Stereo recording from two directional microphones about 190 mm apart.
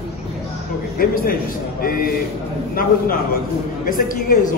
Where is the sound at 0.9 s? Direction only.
50° left (ahead or behind).